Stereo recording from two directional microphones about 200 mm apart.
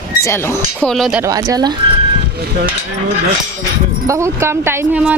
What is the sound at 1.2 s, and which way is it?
Speech, 15° right (ahead or behind).